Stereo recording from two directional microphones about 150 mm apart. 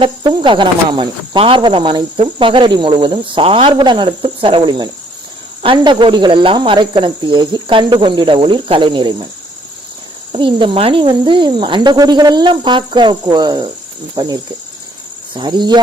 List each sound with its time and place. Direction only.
0.0 s speech: 35° right (ahead or behind)
10.3 s speech: 35° right (ahead or behind)
15.4 s speech: 30° right (ahead or behind)